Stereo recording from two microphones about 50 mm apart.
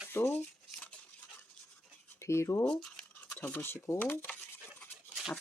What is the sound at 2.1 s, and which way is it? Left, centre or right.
Speech, left.